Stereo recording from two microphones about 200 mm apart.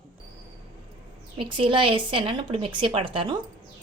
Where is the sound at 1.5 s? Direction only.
25° right (ahead or behind).